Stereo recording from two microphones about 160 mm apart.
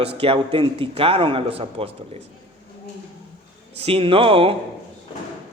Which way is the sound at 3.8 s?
35° right (ahead or behind).